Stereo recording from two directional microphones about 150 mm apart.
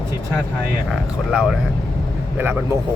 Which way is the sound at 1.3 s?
5° right (ahead or behind).